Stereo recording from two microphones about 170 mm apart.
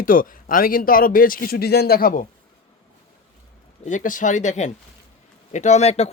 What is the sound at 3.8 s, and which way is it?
Speech, 50° left (ahead or behind).